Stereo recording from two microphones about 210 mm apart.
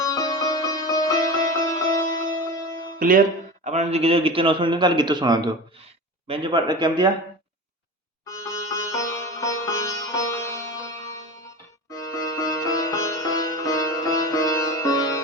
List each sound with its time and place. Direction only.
0.0 s music: 15° left (ahead or behind)
3.0 s a man's voice: 40° right (ahead or behind); by 7.1 s 20° right (ahead or behind)
8.2 s sitar: 15° left (ahead or behind)
11.9 s sitar: 15° left (ahead or behind)